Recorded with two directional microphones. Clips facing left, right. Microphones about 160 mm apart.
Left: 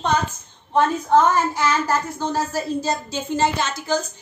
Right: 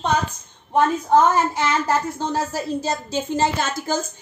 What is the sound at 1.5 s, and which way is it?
Speech, 25° right (ahead or behind).